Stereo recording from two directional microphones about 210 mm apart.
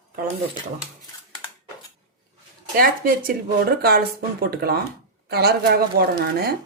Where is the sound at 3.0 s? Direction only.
40° right (ahead or behind).